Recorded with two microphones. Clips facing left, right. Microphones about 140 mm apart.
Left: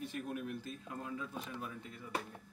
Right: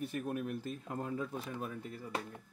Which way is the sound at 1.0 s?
40° right (ahead or behind).